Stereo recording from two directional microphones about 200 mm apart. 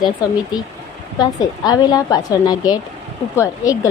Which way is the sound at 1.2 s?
20° left (ahead or behind).